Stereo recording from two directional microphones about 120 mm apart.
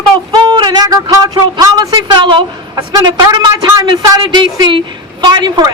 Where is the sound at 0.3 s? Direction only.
35° right (ahead or behind).